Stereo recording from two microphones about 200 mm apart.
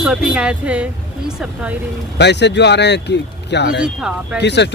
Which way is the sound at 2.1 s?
60° left (ahead or behind).